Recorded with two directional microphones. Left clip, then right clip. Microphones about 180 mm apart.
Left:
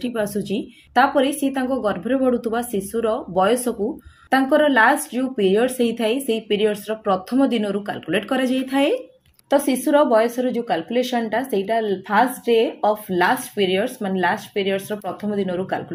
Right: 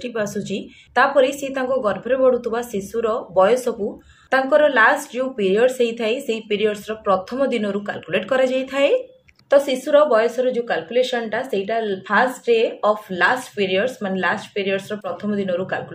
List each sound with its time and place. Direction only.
0.1 s speech: 60° left (ahead or behind)